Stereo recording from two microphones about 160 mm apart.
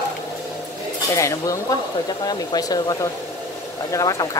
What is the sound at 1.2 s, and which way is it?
Speech, 20° left (ahead or behind).